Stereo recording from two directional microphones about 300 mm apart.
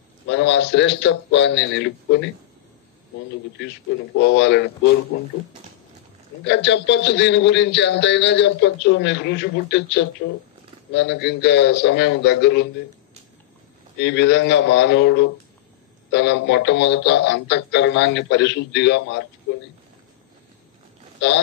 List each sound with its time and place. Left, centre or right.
0.3 s a man's voice: left
4.2 s a man's voice: left
6.4 s a man's voice: left
13.9 s a man's voice: left